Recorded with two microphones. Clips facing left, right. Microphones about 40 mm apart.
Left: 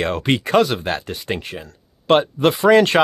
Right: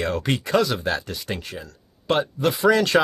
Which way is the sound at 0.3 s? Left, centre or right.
Left.